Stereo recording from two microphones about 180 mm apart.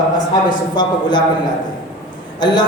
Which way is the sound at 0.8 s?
25° left (ahead or behind).